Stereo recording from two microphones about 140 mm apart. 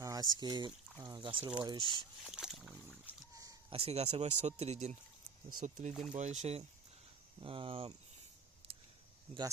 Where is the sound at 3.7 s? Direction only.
45° right (ahead or behind).